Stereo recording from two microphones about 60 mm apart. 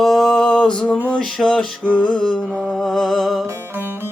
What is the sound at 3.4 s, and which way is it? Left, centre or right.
Music, right.